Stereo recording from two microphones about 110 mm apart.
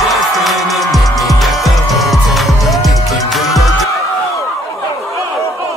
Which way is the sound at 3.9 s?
30° left (ahead or behind).